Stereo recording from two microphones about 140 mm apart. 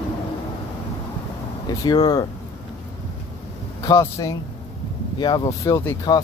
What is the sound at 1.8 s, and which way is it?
Speech, 30° left (ahead or behind).